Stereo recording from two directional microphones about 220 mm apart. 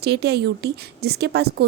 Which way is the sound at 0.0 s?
50° right (ahead or behind).